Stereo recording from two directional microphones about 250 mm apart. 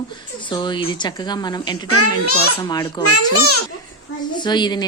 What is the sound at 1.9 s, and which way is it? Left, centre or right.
Speech, left.